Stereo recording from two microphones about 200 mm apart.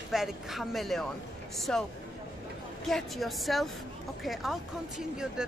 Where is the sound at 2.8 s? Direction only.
Centre (ahead or behind).